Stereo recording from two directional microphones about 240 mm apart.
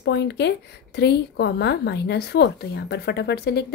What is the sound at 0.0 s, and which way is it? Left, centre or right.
A woman's voice, left.